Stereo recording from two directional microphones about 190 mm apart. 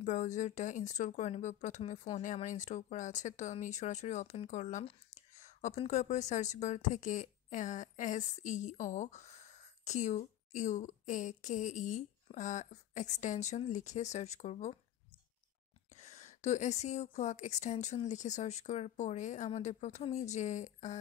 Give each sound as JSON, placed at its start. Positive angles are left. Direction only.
{"t": 0.0, "sound": "speech", "side_deg": 40}
{"t": 15.9, "sound": "speech", "side_deg": 35}